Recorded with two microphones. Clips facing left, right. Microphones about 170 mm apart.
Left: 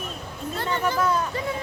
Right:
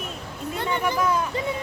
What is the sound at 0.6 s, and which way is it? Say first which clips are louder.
Speech: even; 15° right (ahead or behind).